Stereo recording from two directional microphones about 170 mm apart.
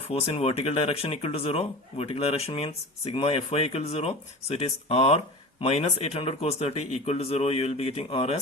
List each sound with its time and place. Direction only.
0.1 s speech: 35° left (ahead or behind)